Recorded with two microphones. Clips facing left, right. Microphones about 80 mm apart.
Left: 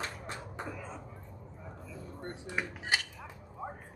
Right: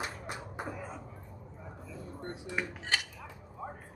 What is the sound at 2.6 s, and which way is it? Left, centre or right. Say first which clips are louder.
Dishes: even; centre.